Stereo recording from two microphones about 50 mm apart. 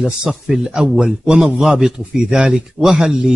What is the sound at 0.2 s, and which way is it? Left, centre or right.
Speech, centre.